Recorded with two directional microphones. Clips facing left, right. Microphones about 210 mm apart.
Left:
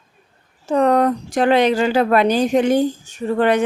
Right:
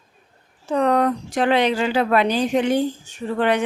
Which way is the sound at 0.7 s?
45° left (ahead or behind).